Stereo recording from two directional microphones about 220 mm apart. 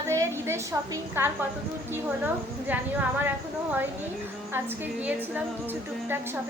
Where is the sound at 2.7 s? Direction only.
10° right (ahead or behind).